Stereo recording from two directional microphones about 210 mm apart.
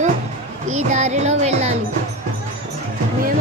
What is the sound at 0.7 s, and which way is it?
Speech, 30° right (ahead or behind).